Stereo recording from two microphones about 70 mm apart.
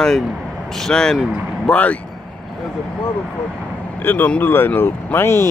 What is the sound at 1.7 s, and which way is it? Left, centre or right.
Speech, centre.